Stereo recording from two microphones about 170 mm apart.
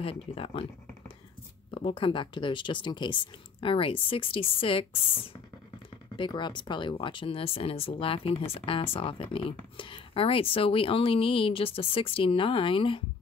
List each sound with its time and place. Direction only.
0.0 s speech: 35° left (ahead or behind)